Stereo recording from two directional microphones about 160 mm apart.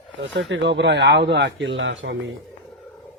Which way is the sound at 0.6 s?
90° right.